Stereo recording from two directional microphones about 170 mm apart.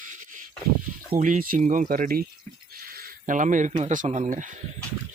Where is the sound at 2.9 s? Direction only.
60° right (ahead or behind).